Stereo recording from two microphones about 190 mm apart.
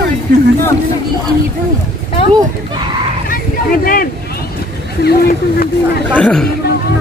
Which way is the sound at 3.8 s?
50° left (ahead or behind).